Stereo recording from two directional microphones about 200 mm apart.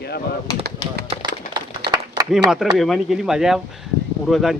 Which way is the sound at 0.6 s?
55° right (ahead or behind).